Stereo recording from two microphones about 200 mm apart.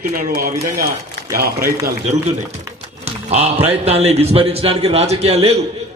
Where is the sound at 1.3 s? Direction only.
50° right (ahead or behind).